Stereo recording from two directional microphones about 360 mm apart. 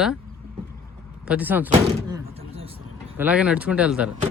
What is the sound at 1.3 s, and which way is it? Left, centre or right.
Speech, centre.